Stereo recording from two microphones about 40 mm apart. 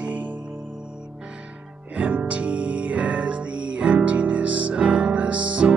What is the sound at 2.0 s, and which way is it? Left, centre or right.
Music, right.